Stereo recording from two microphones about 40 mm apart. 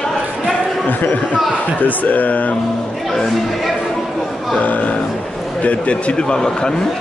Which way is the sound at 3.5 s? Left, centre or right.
Centre.